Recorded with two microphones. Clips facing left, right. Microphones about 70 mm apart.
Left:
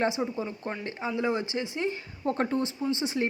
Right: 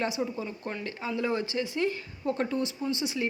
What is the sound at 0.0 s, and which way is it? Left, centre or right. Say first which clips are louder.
Speech: left 3 dB; left.